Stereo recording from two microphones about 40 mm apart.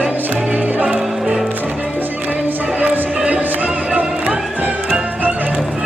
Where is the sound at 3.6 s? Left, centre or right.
Right.